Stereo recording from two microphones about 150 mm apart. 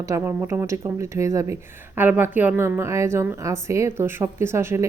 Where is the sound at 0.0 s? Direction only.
20° right (ahead or behind).